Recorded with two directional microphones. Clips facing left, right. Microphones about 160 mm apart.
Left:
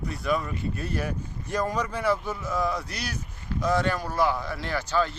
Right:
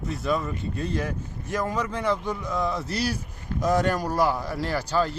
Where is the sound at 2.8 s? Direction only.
30° right (ahead or behind).